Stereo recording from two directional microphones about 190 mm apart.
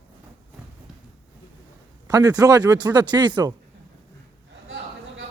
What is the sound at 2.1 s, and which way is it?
Speech, 20° right (ahead or behind).